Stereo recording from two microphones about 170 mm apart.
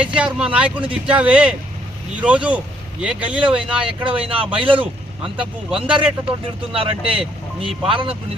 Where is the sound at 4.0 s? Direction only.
30° right (ahead or behind).